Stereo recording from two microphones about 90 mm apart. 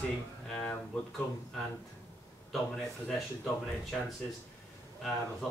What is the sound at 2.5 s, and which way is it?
Speech, centre (ahead or behind).